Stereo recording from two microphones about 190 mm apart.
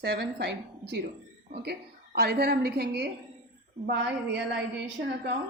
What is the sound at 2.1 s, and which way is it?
Speech, 55° right (ahead or behind).